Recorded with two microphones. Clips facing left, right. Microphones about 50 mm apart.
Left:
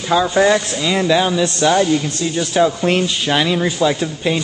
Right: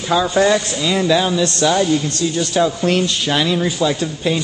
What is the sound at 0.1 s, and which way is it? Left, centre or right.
Speech, centre.